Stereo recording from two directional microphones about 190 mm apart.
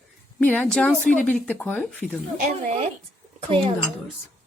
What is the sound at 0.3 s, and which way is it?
A woman's voice, 5° left (ahead or behind).